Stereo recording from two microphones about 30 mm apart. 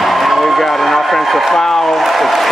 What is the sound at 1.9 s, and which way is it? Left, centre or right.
Speech, centre.